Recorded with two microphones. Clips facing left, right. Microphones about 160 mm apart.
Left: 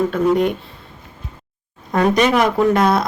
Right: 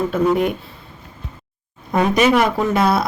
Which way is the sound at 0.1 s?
5° right (ahead or behind).